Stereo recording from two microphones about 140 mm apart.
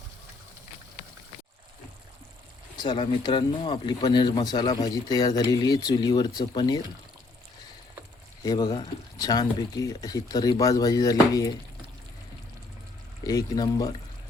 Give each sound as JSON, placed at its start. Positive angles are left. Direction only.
{"t": 2.7, "sound": "speech", "side_deg": 35}
{"t": 8.4, "sound": "speech", "side_deg": 30}
{"t": 13.2, "sound": "speech", "side_deg": 25}